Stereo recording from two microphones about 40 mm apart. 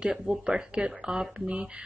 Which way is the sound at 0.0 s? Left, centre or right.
Centre.